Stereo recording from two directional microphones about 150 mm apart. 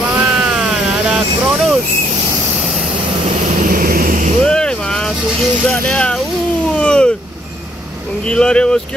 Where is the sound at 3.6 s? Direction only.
70° right (ahead or behind).